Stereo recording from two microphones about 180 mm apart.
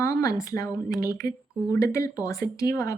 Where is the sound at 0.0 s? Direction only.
20° left (ahead or behind).